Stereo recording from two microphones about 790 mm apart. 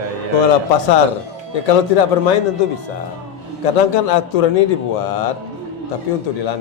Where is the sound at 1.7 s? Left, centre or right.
Left.